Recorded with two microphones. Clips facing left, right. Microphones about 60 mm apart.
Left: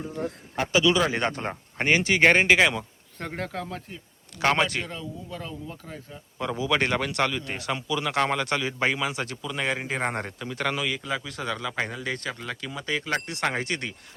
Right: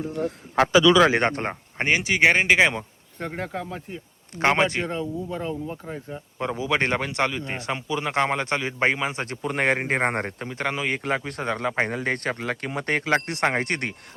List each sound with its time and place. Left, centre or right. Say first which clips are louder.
0.5 s speech: right 6 dB; right
1.0 s speech: right 6 dB; right
1.5 s speech: even; right
2.0 s speech: even; centre
4.4 s speech: right 3 dB; right
9.4 s speech: right 8 dB; right
10.8 s speech: right 4 dB; right